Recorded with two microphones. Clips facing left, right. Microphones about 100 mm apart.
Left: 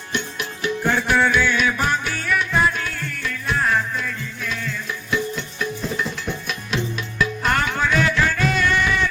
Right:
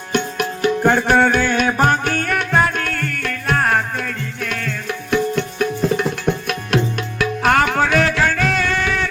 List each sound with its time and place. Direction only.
0.1 s music: 55° right (ahead or behind)
7.2 s music: 75° right (ahead or behind)